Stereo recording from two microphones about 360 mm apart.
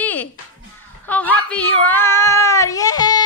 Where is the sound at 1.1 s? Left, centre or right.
Centre.